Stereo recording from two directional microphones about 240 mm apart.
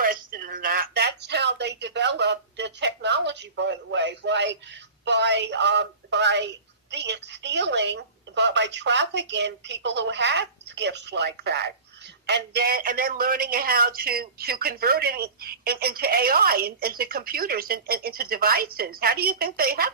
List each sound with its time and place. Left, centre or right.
0.0 s a woman's voice: right